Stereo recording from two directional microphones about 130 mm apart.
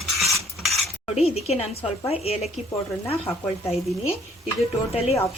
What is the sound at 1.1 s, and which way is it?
Speech, 50° left (ahead or behind).